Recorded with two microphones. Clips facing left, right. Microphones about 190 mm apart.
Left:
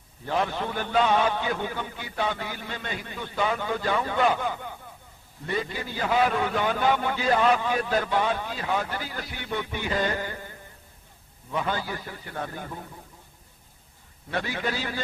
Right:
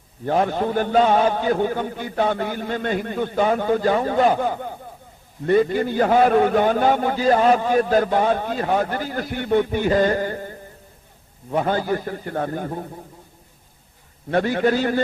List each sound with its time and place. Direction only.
0.3 s a man's voice: 45° right (ahead or behind)
14.3 s a man's voice: 50° right (ahead or behind)